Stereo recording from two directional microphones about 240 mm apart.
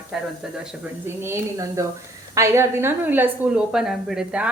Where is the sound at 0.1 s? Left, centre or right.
Centre.